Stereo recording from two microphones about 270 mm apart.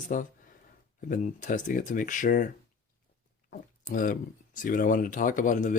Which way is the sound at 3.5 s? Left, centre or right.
Left.